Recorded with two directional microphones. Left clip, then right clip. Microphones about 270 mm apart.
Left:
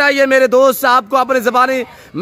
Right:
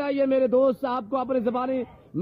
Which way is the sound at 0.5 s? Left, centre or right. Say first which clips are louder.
Left 11 dB; left.